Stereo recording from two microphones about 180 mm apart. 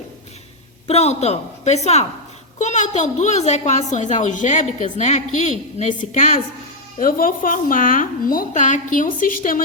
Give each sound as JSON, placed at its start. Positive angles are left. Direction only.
{"t": 0.9, "sound": "a woman's voice", "side_deg": 35}